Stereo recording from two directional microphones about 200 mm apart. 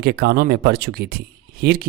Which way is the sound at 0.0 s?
50° right (ahead or behind).